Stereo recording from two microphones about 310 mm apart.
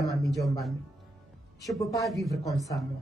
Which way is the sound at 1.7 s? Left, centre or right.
Centre.